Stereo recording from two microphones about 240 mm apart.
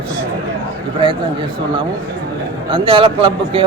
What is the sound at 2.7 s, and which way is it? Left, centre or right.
Speech, right.